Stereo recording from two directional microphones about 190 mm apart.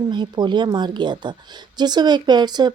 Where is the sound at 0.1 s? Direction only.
25° right (ahead or behind).